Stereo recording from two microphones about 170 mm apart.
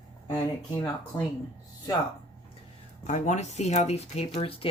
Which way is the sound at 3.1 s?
45° left (ahead or behind).